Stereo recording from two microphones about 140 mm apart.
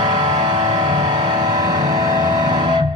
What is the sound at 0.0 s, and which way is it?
Vehicle, 55° right (ahead or behind).